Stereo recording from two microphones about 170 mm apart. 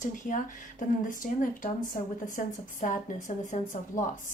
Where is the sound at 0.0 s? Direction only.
50° left (ahead or behind).